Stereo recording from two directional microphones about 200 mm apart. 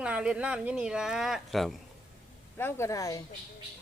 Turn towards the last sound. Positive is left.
turn(degrees=15)  # may be behind; listen again after turning